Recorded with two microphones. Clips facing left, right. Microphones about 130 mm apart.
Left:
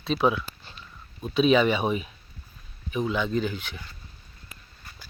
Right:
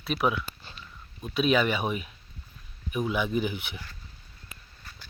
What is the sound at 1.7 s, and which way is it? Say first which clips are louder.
Speech: left 4 dB; 30° left (ahead or behind).